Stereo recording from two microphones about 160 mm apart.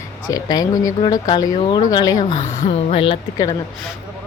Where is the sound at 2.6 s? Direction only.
40° left (ahead or behind).